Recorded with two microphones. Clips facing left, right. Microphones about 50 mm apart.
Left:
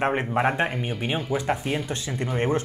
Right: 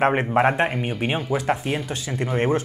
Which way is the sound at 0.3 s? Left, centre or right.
Centre.